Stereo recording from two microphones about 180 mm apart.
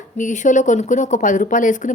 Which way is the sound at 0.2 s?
45° left (ahead or behind).